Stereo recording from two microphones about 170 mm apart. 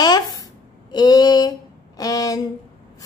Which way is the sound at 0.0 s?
20° left (ahead or behind).